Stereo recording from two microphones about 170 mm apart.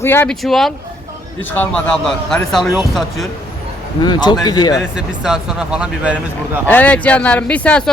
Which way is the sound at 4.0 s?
25° left (ahead or behind).